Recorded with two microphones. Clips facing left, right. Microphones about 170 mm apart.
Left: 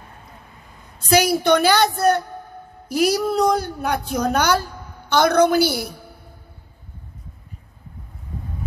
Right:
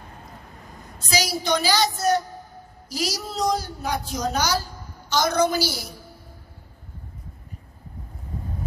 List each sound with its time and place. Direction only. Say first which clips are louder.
0.9 s a woman's voice: left 9 dB; 60° left (ahead or behind)